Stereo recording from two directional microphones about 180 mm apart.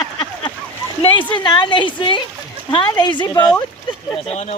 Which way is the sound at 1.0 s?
25° left (ahead or behind).